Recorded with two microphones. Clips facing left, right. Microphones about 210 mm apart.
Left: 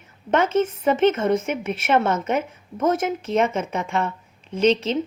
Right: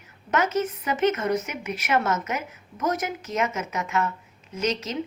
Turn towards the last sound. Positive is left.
turn(degrees=30)  # may be behind; listen again after turning